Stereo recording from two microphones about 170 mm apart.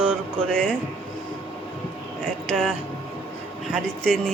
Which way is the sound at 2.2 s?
5° left (ahead or behind).